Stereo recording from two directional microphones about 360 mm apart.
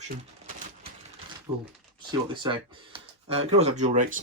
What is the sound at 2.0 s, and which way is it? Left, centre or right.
Speech, centre.